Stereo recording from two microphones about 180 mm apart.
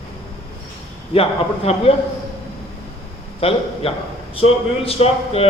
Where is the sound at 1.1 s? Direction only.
30° left (ahead or behind).